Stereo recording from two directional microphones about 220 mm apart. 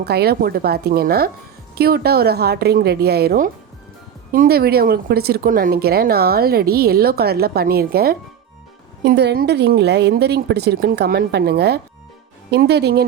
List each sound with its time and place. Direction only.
0.0 s speech: 45° right (ahead or behind)